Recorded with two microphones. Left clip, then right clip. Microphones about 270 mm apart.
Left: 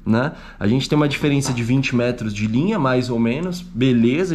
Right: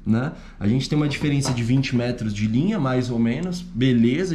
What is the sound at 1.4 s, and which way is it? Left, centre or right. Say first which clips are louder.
Speech: left 3 dB; centre.